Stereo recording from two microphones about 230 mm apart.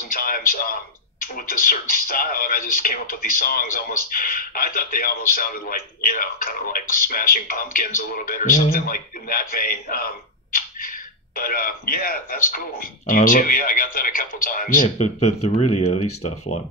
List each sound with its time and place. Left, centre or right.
0.1 s a man's voice: left